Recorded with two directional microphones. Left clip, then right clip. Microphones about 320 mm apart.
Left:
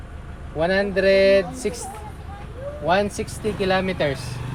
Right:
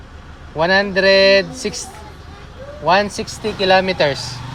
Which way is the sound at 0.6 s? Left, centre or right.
Right.